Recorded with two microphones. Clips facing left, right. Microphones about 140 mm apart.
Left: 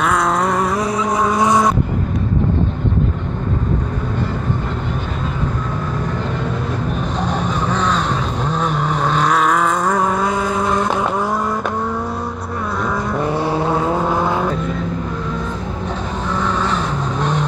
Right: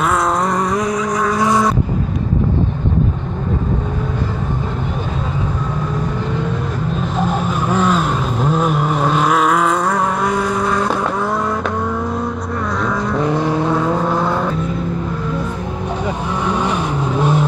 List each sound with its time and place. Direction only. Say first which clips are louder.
0.7 s vehicle: even; 30° left (ahead or behind)
1.4 s vehicle: even; 20° left (ahead or behind)
7.2 s vehicle: right 3 dB; 5° right (ahead or behind)
13.1 s vehicle: right 3 dB; 5° left (ahead or behind)
16.4 s vehicle: right 3 dB; 15° right (ahead or behind)